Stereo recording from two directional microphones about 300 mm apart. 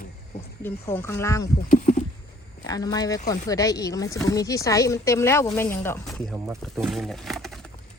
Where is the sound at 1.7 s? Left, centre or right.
Left.